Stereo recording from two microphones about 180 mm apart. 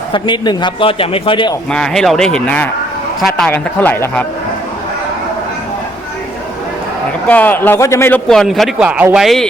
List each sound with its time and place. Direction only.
0.1 s a man's voice: 25° left (ahead or behind)
1.7 s a man's voice: 5° left (ahead or behind)
7.3 s a man's voice: 10° left (ahead or behind)
8.3 s speech: centre (ahead or behind)